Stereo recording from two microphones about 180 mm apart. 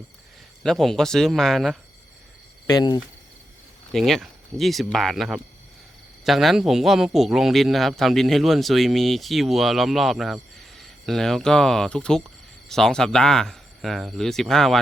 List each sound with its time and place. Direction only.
0.6 s a man's voice: centre (ahead or behind)
2.6 s speech: 20° left (ahead or behind)
3.9 s a man's voice: centre (ahead or behind)